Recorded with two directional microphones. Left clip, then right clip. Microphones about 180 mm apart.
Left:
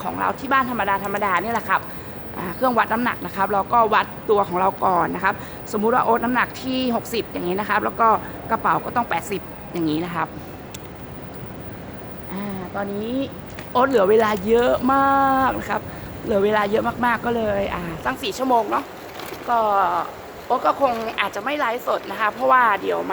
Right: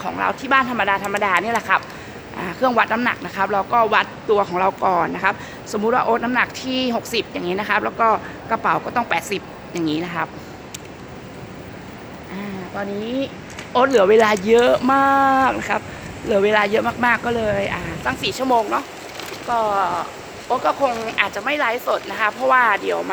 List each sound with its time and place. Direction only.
0.0 s speech: 10° right (ahead or behind)
12.7 s speech: 10° right (ahead or behind)